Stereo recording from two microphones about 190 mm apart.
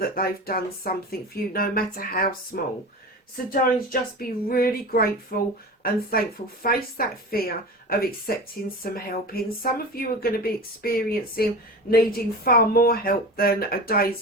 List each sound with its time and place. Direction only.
0.2 s speech: 50° left (ahead or behind)